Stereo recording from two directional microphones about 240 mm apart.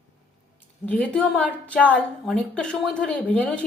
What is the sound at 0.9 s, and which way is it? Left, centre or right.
A woman's voice, centre.